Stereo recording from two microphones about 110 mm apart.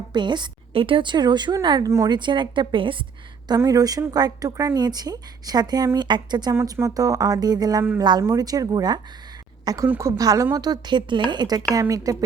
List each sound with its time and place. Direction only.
0.1 s a woman's voice: 45° right (ahead or behind)
3.6 s a woman's voice: 35° right (ahead or behind)
6.5 s a woman's voice: 25° right (ahead or behind)